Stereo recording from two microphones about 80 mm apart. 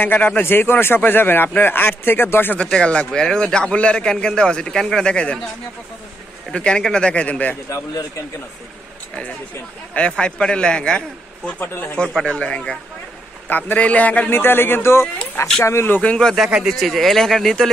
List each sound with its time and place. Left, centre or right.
0.0 s speech: left
2.5 s a man's voice: centre
6.5 s a man's voice: centre
9.9 s a man's voice: centre
11.6 s speech: left
12.3 s a man's voice: centre; by 16.0 s left
16.0 s a man's voice: centre
16.6 s speech: centre